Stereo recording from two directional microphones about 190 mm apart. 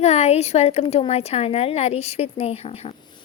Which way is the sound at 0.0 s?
35° left (ahead or behind).